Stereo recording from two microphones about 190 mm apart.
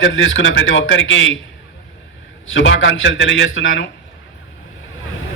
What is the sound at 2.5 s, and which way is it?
A man's voice, 90° left.